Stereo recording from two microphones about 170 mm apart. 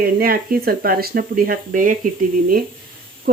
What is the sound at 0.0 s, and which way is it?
Speech, 60° right (ahead or behind).